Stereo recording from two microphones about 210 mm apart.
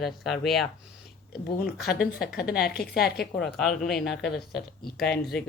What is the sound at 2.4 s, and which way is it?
Speech, 45° left (ahead or behind).